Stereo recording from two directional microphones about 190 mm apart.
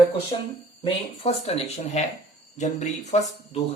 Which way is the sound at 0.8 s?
35° left (ahead or behind).